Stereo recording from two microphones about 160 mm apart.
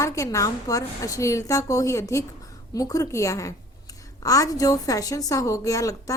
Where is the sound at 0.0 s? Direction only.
20° left (ahead or behind).